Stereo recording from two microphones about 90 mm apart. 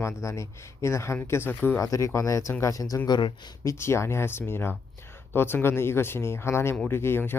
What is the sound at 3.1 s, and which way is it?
Speech, 65° left (ahead or behind).